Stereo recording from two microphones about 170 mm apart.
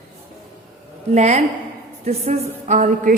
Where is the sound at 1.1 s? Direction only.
45° right (ahead or behind).